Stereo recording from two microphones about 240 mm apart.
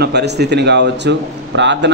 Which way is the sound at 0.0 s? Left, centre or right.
Right.